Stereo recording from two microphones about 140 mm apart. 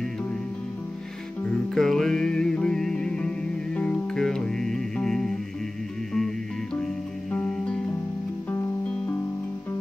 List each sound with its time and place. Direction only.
1.7 s music: centre (ahead or behind)